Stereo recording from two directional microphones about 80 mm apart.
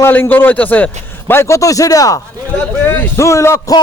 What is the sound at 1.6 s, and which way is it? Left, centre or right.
Speech, left.